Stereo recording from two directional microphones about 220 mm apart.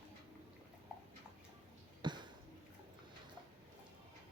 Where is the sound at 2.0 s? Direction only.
20° right (ahead or behind).